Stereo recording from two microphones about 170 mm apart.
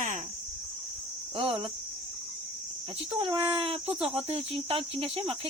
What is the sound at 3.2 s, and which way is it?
Speech, 30° right (ahead or behind).